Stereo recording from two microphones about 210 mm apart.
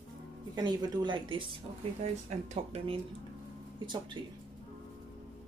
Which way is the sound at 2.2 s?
30° right (ahead or behind).